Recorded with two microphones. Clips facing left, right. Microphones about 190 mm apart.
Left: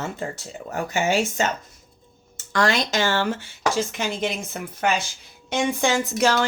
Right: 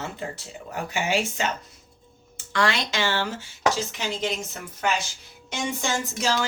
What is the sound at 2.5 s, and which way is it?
A woman's voice, 45° left (ahead or behind).